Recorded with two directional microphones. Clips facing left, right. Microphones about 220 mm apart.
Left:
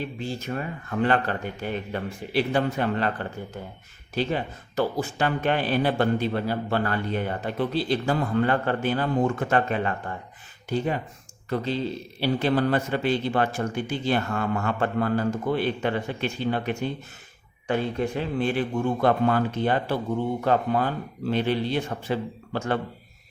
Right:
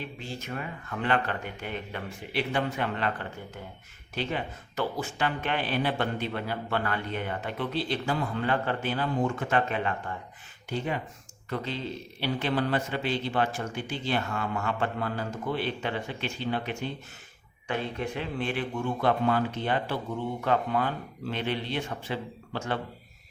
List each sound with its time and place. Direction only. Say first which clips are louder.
0.2 s a man's voice: left 6 dB; 35° left (ahead or behind)